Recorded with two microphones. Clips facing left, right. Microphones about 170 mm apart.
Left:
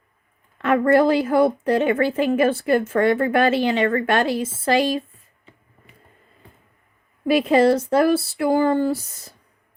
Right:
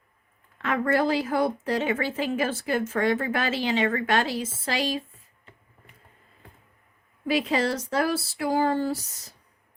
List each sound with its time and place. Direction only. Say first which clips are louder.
0.6 s a woman's voice: left 8 dB; 55° left (ahead or behind)
7.3 s a woman's voice: left 9 dB; 55° left (ahead or behind)